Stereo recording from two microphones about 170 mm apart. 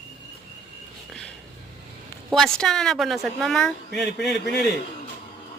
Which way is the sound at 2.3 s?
Centre (ahead or behind).